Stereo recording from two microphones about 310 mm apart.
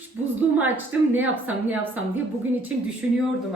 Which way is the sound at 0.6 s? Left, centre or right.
Centre.